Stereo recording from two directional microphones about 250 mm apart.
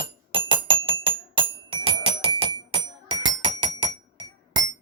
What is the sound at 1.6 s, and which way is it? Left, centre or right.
Doorbell, right.